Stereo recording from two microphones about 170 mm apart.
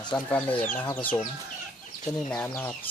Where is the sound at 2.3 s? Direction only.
10° left (ahead or behind).